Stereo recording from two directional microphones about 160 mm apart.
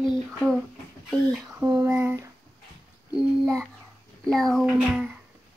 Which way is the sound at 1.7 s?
15° right (ahead or behind).